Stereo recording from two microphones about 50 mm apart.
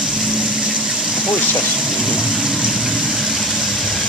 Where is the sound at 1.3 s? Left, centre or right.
Left.